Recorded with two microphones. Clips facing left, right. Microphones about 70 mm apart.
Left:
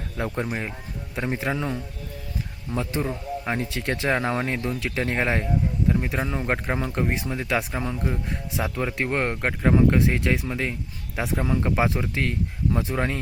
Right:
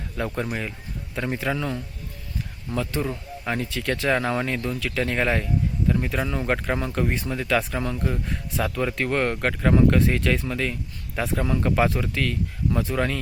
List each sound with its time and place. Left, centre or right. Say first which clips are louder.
0.3 s speech: even; left
2.7 s speech: even; centre
9.6 s speech: even; centre
9.9 s speech: right 1 dB; centre